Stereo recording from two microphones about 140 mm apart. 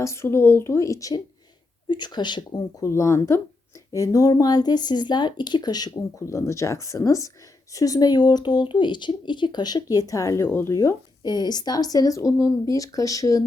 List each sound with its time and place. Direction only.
0.0 s speech: 20° left (ahead or behind)
2.8 s speech: 20° left (ahead or behind)